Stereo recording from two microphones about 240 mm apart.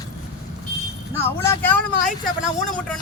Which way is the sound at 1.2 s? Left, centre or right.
Centre.